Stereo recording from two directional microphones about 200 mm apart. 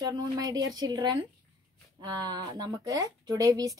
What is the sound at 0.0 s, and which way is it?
A woman's voice, 20° right (ahead or behind).